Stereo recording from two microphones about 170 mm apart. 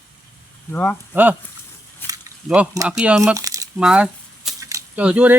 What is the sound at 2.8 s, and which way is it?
Speech, 5° right (ahead or behind).